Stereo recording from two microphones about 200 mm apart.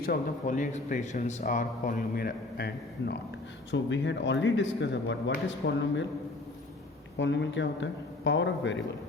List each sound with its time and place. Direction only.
0.0 s speech: 45° left (ahead or behind)
3.7 s speech: 65° left (ahead or behind)
7.2 s speech: 60° left (ahead or behind)